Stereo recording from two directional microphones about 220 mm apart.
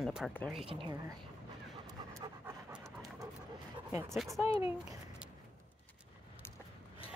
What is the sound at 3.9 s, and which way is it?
Speech, 10° right (ahead or behind).